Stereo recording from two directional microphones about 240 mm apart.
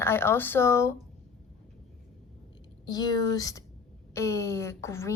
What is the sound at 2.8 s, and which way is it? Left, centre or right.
A woman's voice, centre.